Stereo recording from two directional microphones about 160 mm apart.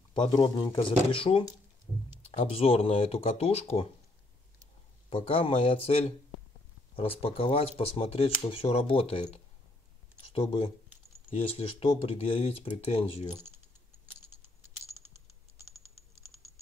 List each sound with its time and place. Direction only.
0.1 s speech: 30° left (ahead or behind)
5.1 s speech: 35° left (ahead or behind)
15.1 s typing: 20° right (ahead or behind)